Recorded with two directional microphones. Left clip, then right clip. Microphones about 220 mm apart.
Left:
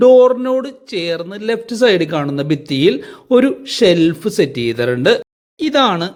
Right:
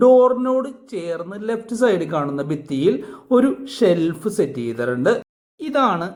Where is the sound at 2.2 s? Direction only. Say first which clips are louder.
Left 4 dB; 50° left (ahead or behind).